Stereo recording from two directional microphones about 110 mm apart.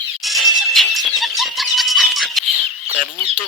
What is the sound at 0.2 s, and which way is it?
Music, centre (ahead or behind).